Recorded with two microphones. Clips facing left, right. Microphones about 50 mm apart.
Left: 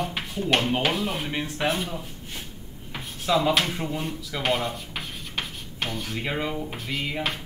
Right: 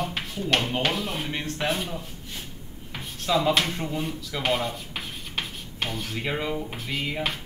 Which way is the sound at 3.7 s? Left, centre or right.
Centre.